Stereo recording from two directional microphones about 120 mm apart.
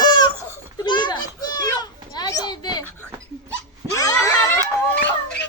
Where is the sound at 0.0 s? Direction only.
35° left (ahead or behind).